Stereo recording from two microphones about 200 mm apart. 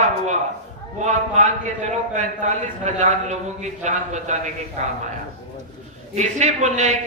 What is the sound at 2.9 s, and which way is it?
A man's voice, 35° right (ahead or behind).